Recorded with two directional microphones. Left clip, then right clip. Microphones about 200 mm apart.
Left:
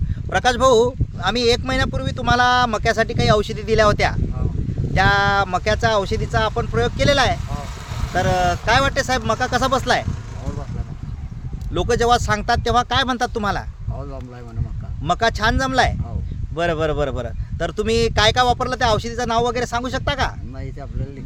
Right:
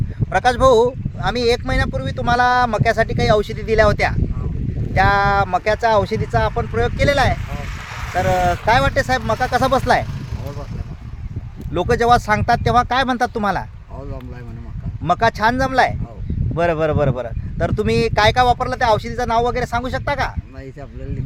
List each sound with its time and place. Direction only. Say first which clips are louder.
0.3 s speech: right 2 dB; 35° right (ahead or behind)
11.7 s speech: right 2 dB; 40° right (ahead or behind)
15.0 s speech: right 3 dB; 40° right (ahead or behind)